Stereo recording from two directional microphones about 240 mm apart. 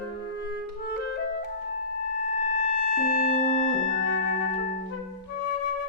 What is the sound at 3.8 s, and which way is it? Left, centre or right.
Music, right.